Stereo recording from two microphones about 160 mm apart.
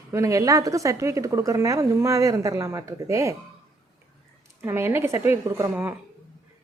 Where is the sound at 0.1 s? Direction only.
20° right (ahead or behind).